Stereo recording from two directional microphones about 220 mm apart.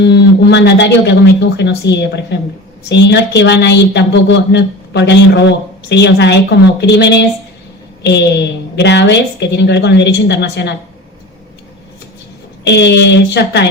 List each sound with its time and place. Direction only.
0.0 s a woman's voice: 50° left (ahead or behind)
12.6 s a woman's voice: 50° left (ahead or behind)